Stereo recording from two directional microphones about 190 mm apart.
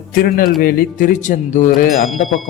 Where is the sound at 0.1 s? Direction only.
50° left (ahead or behind).